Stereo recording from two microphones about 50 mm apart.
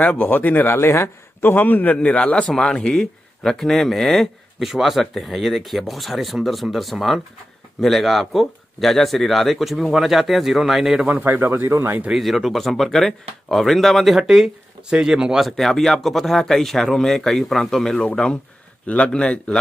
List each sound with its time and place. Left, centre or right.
0.1 s speech: left
0.7 s speech: left
1.4 s speech: left
2.0 s speech: left
2.5 s speech: centre
11.2 s speech: right
11.7 s speech: right
12.1 s speech: centre
15.4 s speech: centre; by 19.6 s left